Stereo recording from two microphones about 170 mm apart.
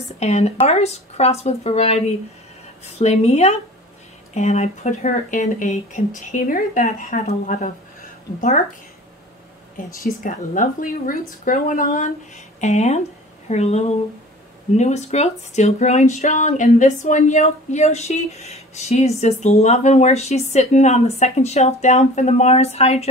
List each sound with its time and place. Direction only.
0.2 s speech: 40° left (ahead or behind)
10.2 s speech: 50° left (ahead or behind)